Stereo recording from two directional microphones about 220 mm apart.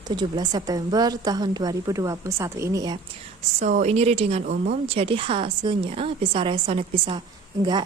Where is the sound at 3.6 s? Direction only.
30° right (ahead or behind).